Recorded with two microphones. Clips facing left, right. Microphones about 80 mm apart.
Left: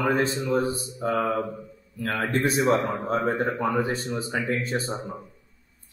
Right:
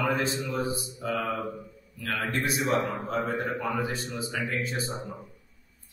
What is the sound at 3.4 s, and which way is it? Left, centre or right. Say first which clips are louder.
Speech: left 5 dB; left.